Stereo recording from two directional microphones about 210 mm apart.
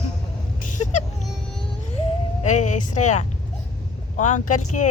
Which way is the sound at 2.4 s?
35° left (ahead or behind).